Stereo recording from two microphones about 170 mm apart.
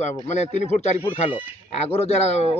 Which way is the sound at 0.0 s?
45° left (ahead or behind).